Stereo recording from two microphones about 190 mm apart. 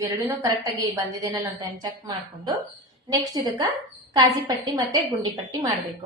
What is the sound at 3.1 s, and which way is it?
A woman's voice, 20° right (ahead or behind).